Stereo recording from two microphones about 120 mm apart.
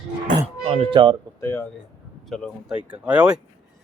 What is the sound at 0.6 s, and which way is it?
Speech, 55° right (ahead or behind).